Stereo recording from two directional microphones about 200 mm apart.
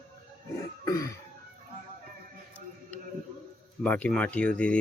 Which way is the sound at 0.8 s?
20° left (ahead or behind).